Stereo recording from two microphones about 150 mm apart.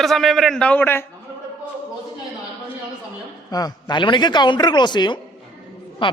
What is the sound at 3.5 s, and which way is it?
A man's voice, 25° left (ahead or behind).